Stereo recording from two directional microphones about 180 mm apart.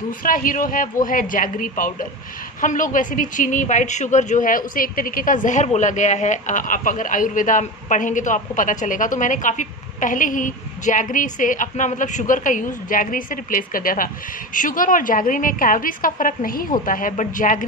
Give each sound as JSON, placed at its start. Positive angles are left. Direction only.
{"t": 0.2, "sound": "speech", "side_deg": 50}